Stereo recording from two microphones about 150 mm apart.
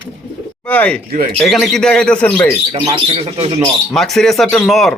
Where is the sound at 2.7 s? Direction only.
35° right (ahead or behind).